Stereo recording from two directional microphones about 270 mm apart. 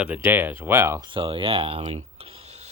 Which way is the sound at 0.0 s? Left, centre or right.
Centre.